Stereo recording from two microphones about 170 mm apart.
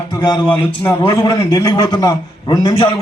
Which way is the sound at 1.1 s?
20° left (ahead or behind).